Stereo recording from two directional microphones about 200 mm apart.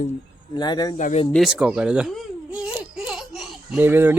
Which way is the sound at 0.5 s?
20° left (ahead or behind).